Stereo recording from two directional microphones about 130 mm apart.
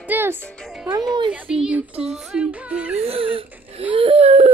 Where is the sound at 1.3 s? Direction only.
5° right (ahead or behind).